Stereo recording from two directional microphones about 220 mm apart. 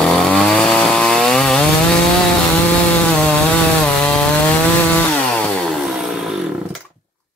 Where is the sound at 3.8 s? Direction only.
5° left (ahead or behind).